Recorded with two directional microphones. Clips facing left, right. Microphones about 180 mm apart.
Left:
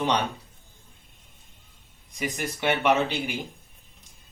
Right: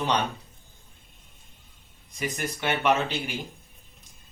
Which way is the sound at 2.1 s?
15° left (ahead or behind).